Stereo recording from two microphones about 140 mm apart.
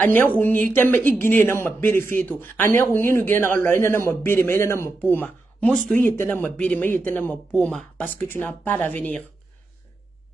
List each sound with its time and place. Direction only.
0.0 s speech: 15° left (ahead or behind)